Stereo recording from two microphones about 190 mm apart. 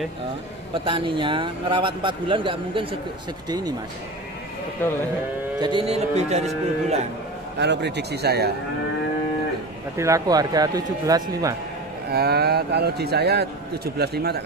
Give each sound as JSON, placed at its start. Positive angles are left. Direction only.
{"t": 0.8, "sound": "a man's voice", "side_deg": -25}
{"t": 5.6, "sound": "speech", "side_deg": -25}
{"t": 7.5, "sound": "a man's voice", "side_deg": -65}
{"t": 9.9, "sound": "a man's voice", "side_deg": -15}
{"t": 12.1, "sound": "a man's voice", "side_deg": -55}